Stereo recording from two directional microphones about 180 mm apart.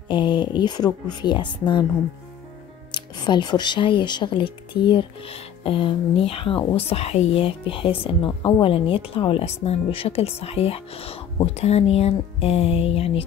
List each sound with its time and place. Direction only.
0.1 s speech: 25° left (ahead or behind)
2.9 s speech: 25° left (ahead or behind)